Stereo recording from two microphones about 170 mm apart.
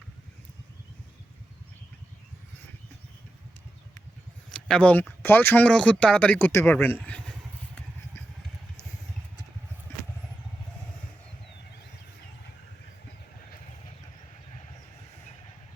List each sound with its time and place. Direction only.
4.5 s speech: 5° left (ahead or behind)